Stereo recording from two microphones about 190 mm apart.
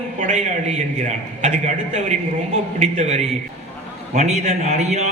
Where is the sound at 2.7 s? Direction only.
35° right (ahead or behind).